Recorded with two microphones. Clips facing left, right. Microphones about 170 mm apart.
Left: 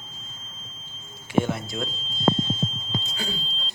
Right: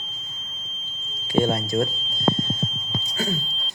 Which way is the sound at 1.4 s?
40° right (ahead or behind).